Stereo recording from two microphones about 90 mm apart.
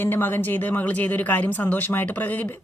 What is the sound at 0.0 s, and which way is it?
Speech, 25° left (ahead or behind).